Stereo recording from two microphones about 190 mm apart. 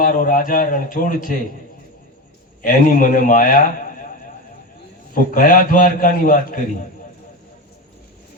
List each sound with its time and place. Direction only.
0.0 s a man's voice: 45° left (ahead or behind)
2.6 s a man's voice: 45° left (ahead or behind)
5.1 s a man's voice: 45° left (ahead or behind)